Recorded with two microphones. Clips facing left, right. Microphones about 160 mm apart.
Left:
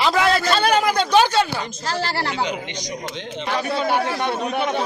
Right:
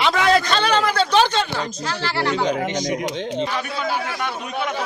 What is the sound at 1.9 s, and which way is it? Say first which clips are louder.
Speech: left 1 dB; 40° left (ahead or behind).